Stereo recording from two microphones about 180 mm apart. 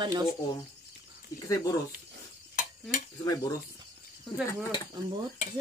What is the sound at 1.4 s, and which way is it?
Speech, 20° left (ahead or behind).